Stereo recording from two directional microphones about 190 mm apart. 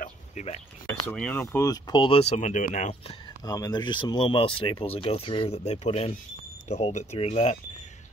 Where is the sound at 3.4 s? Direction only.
20° left (ahead or behind).